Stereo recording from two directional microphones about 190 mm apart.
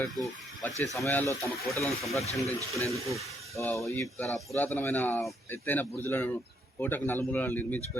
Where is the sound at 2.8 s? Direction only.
15° right (ahead or behind).